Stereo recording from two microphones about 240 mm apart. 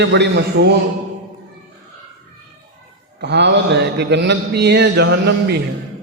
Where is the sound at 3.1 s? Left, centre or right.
Right.